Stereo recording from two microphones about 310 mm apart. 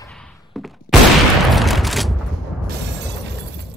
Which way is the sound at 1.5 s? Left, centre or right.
Centre.